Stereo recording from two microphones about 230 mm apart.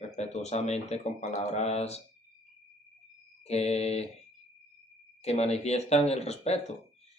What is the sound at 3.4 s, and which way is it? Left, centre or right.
Speech, left.